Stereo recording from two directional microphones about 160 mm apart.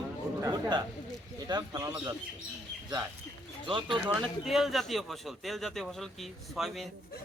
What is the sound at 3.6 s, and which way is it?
Speech, 30° right (ahead or behind).